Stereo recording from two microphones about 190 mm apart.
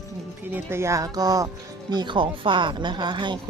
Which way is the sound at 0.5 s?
15° right (ahead or behind).